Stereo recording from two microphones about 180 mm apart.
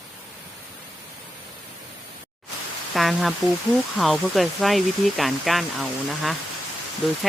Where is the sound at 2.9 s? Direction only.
Centre (ahead or behind).